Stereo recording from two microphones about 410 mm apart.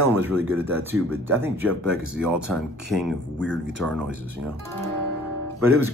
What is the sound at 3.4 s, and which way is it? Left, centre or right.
Speech, right.